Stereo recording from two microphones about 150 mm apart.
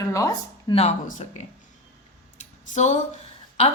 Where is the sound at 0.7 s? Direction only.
40° left (ahead or behind).